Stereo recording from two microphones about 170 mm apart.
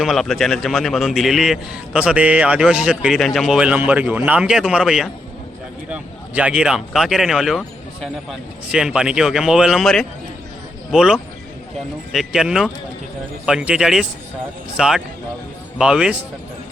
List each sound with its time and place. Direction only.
0.0 s a man's voice: centre (ahead or behind)